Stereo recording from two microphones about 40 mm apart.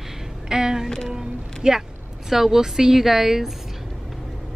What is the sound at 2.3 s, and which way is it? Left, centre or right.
A woman's voice, centre.